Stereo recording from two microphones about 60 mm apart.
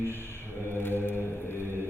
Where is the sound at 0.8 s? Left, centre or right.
Left.